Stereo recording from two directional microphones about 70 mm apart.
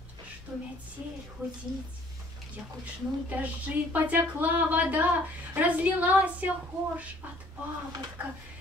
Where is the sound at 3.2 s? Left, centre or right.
Right.